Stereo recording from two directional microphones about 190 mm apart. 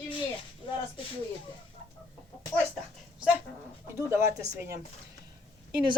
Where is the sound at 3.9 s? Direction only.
15° right (ahead or behind).